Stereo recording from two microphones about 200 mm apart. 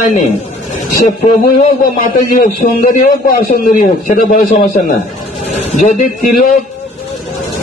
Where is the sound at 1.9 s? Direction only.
40° left (ahead or behind).